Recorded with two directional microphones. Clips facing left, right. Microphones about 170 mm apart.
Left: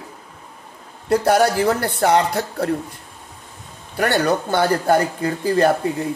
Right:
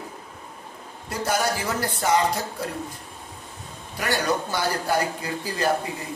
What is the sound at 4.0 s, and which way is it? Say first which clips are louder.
Speech: left 6 dB; 60° left (ahead or behind).